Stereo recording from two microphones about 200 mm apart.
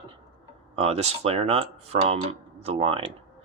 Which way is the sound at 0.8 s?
30° right (ahead or behind).